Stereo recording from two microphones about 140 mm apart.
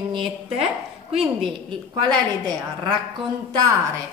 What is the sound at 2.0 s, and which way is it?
Speech, 30° right (ahead or behind).